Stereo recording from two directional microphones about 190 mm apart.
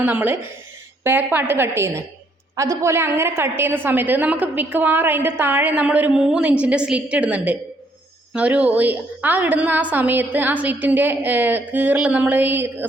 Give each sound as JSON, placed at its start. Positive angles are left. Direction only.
{"t": 0.0, "sound": "a woman's voice", "side_deg": -10}